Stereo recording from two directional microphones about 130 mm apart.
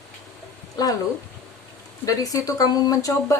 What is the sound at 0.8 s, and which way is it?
Speech, 30° left (ahead or behind).